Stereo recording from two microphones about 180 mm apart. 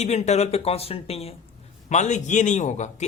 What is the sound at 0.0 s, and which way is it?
Speech, 40° left (ahead or behind).